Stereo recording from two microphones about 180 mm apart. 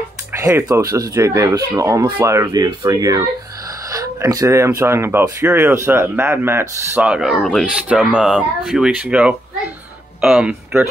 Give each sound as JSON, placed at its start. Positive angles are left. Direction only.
{"t": 0.3, "sound": "speech", "side_deg": -15}
{"t": 7.3, "sound": "speech", "side_deg": 10}
{"t": 7.7, "sound": "speech", "side_deg": -5}